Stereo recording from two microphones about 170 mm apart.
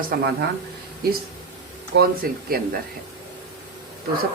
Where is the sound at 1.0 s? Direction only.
65° right (ahead or behind).